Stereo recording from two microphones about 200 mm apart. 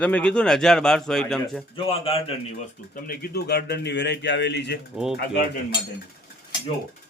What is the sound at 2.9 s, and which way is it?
Speech, 50° left (ahead or behind).